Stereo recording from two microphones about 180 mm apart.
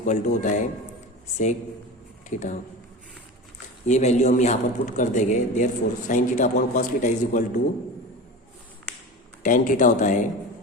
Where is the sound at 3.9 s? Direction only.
40° left (ahead or behind).